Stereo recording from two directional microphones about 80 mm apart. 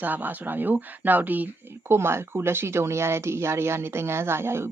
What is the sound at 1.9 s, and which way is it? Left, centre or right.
Speech, right.